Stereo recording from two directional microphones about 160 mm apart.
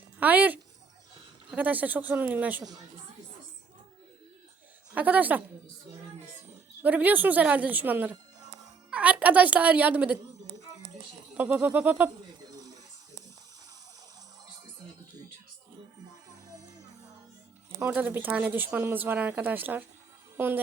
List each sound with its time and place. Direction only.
0.2 s a woman's voice: 10° right (ahead or behind)
4.9 s a woman's voice: 10° right (ahead or behind)
6.8 s a woman's voice: 10° right (ahead or behind)
11.3 s a woman's voice: 10° right (ahead or behind)
12.5 s a sound: 20° right (ahead or behind)
17.7 s a woman's voice: 15° right (ahead or behind)